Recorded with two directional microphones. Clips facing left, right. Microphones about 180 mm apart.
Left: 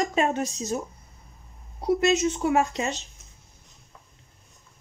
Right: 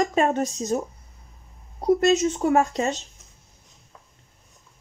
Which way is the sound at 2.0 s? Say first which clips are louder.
Right 2 dB; 45° right (ahead or behind).